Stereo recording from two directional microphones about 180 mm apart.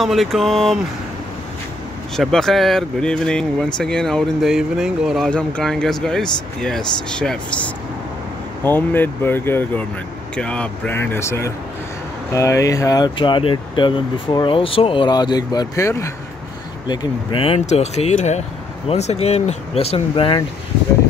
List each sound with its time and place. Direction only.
0.0 s speech: centre (ahead or behind)
2.1 s speech: centre (ahead or behind); by 20.4 s 30° left (ahead or behind)